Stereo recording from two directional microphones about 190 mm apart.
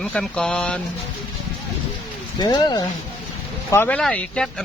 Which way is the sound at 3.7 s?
10° left (ahead or behind).